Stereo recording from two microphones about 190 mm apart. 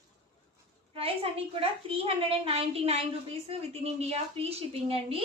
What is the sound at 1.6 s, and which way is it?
A woman's voice, 30° right (ahead or behind).